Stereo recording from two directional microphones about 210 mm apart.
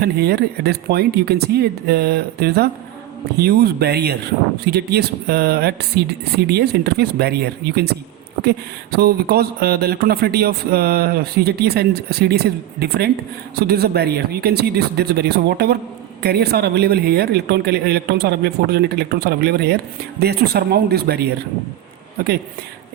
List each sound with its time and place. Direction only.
0.0 s speech: 50° right (ahead or behind)